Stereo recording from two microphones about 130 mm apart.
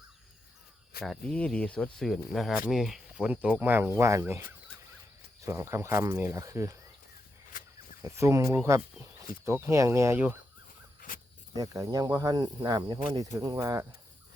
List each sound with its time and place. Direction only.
1.0 s speech: 5° left (ahead or behind); by 4.4 s 20° right (ahead or behind)
5.5 s speech: 20° right (ahead or behind)
7.5 s a sound: 90° left
8.0 s speech: 20° right (ahead or behind)
11.5 s speech: 25° right (ahead or behind)